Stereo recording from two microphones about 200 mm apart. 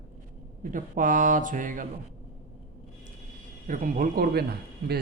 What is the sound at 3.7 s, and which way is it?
Speech, 45° right (ahead or behind).